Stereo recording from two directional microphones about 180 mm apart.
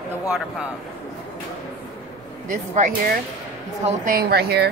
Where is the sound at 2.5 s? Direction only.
45° right (ahead or behind); by 4.7 s 60° right (ahead or behind).